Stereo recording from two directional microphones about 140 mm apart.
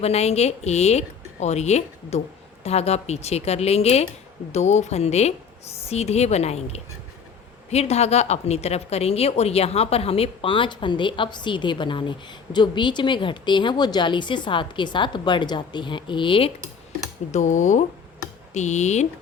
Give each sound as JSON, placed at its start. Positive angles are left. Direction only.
{"t": 0.0, "sound": "a woman's voice", "side_deg": 50}
{"t": 17.3, "sound": "speech", "side_deg": 60}